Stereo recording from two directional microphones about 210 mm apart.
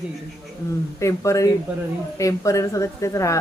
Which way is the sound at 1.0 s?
15° left (ahead or behind).